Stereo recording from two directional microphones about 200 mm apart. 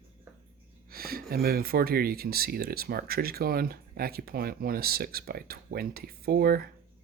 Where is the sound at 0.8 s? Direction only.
50° right (ahead or behind).